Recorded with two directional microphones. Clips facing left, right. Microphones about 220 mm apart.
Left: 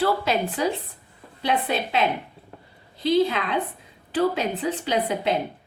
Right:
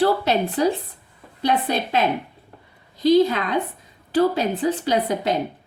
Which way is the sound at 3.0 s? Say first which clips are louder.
Right 5 dB; 40° right (ahead or behind).